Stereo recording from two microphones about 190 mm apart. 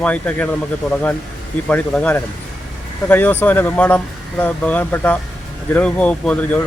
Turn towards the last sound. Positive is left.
turn(degrees=10)  # may be behind; listen again after turning